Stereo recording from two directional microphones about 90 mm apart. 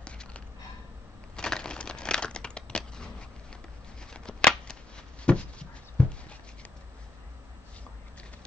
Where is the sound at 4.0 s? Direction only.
10° left (ahead or behind).